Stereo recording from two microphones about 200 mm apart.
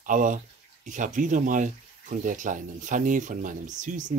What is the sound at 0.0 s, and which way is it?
Speech, 40° right (ahead or behind).